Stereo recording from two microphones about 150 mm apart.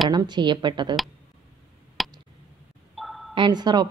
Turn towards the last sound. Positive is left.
turn(degrees=-30)  # may be behind; listen again after turning